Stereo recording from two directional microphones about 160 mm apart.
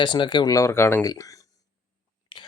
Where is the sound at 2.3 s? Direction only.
30° left (ahead or behind).